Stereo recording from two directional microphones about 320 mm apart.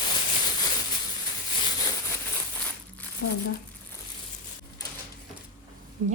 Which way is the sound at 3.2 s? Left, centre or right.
Left.